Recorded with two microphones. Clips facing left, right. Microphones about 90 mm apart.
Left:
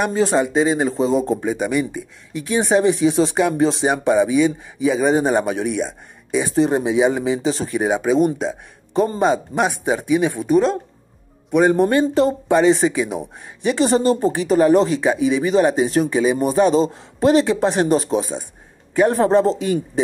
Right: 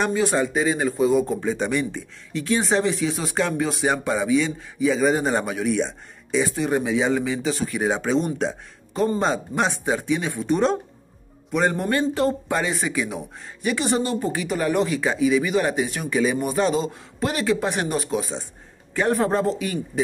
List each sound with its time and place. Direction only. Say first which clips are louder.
0.1 s speech: left 4 dB; 30° left (ahead or behind)
1.4 s speech: left 3 dB; 10° left (ahead or behind)
5.8 s speech: left 1 dB; 10° left (ahead or behind)
6.5 s speech: left 5 dB; 30° left (ahead or behind)
7.9 s speech: left 9 dB; 10° left (ahead or behind)
8.9 s speech: left 4 dB; 20° left (ahead or behind)
10.5 s speech: left 4 dB; centre (ahead or behind)
11.7 s speech: left 7 dB; 20° left (ahead or behind)